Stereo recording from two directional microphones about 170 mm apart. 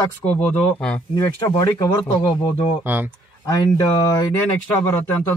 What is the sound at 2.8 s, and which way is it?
Speech, 10° right (ahead or behind).